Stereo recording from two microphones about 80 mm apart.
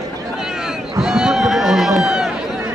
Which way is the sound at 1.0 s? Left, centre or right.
Centre.